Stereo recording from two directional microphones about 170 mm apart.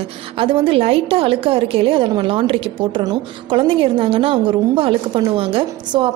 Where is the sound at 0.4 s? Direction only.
30° right (ahead or behind).